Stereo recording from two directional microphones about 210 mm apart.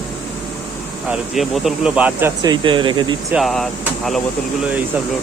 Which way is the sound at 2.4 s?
25° right (ahead or behind).